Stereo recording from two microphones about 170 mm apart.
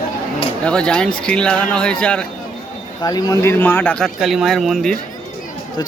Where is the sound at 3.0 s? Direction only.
20° left (ahead or behind); by 5.0 s centre (ahead or behind).